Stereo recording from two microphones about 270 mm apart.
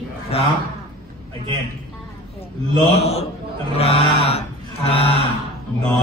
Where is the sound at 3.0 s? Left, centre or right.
Left.